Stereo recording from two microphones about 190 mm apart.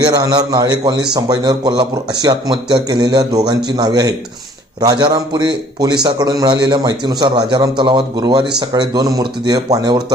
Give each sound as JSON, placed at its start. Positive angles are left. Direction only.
{"t": 0.0, "sound": "a man's voice", "side_deg": -20}